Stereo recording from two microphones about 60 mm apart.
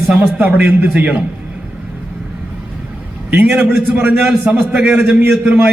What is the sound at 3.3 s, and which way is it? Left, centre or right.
Speech, right.